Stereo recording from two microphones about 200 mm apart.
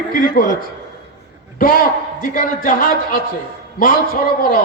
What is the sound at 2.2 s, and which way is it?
Speech, 45° left (ahead or behind).